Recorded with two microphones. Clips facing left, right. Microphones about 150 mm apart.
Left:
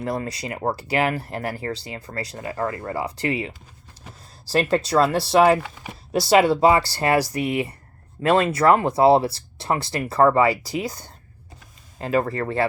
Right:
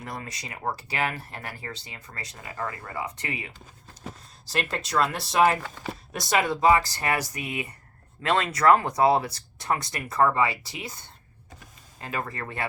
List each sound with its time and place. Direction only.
0.0 s speech: 35° left (ahead or behind)